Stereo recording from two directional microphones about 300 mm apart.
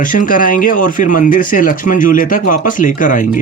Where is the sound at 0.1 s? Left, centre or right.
Left.